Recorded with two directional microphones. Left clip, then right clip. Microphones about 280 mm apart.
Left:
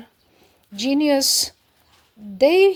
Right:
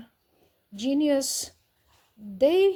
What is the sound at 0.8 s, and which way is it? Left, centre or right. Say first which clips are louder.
Speech: left 6 dB; centre.